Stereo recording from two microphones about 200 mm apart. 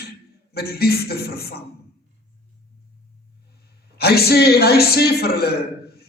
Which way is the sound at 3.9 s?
50° left (ahead or behind).